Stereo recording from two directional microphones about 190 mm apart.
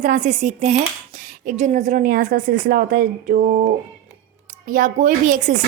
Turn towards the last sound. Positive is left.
turn(degrees=-40)  # may be behind; listen again after turning